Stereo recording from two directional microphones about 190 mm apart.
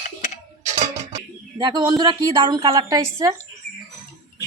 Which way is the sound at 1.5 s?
20° right (ahead or behind).